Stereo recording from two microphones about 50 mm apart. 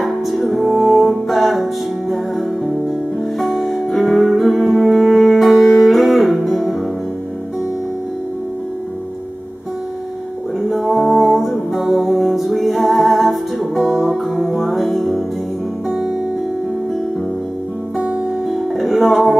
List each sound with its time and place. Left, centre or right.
0.0 s music: centre
10.6 s music: centre
17.9 s music: right
18.5 s music: centre